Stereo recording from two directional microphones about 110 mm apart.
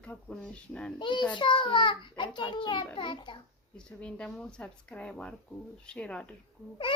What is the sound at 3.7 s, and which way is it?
Speech, 10° left (ahead or behind).